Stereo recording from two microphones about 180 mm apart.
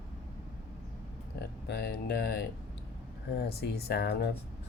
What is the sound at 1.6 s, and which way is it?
Speech, 70° left (ahead or behind).